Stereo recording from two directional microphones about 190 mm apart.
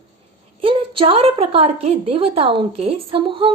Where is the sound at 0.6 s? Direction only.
25° right (ahead or behind).